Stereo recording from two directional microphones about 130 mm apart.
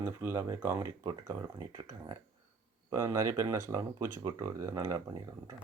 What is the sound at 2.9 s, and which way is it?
Speech, 25° right (ahead or behind).